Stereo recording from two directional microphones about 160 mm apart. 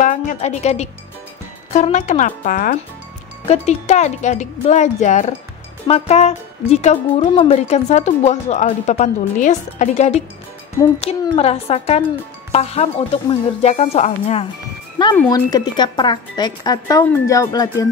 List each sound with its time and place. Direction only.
0.0 s a woman's voice: 55° left (ahead or behind)
3.4 s speech: 40° left (ahead or behind)
15.2 s speech: 25° left (ahead or behind)